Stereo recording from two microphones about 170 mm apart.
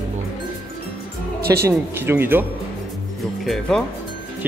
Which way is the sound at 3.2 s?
Centre (ahead or behind).